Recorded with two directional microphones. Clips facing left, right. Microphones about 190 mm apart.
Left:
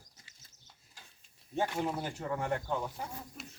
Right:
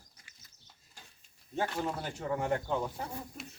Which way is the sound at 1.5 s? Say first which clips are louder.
Left 1 dB; 15° left (ahead or behind).